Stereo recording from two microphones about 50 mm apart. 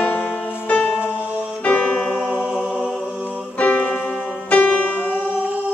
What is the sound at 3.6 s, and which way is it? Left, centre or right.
Music, left.